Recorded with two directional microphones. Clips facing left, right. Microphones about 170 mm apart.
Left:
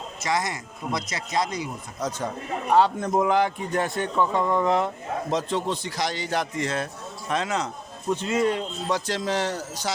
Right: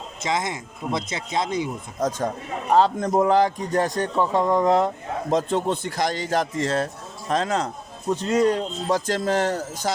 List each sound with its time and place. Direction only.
0.3 s speech: 20° right (ahead or behind)
2.0 s a man's voice: 45° right (ahead or behind)
2.7 s speech: 35° right (ahead or behind)
5.3 s a man's voice: 50° right (ahead or behind)